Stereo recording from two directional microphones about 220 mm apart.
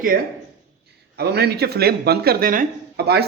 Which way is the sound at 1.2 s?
45° right (ahead or behind).